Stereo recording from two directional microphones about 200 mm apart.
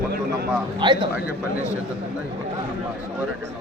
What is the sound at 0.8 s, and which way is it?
Speech, 25° right (ahead or behind).